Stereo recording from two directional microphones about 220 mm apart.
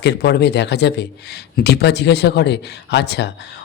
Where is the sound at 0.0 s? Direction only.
50° left (ahead or behind).